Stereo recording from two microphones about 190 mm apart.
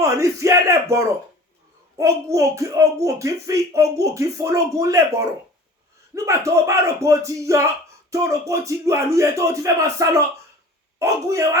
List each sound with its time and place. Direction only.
0.0 s speech: 15° right (ahead or behind)